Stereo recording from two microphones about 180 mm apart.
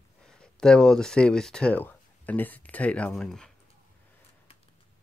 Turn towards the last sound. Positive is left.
turn(degrees=0)  # may be behind; listen again after turning